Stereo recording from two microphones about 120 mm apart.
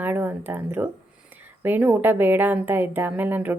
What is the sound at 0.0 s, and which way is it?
A woman's voice, 15° right (ahead or behind).